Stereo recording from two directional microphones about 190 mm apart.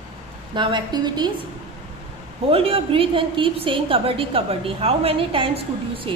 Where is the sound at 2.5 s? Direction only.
30° right (ahead or behind).